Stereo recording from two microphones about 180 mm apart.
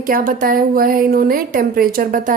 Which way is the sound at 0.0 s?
50° right (ahead or behind).